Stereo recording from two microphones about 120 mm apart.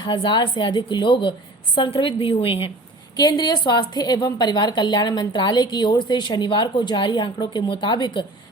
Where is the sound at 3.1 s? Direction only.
35° left (ahead or behind).